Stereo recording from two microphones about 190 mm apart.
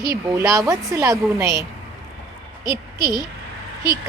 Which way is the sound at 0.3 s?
15° right (ahead or behind).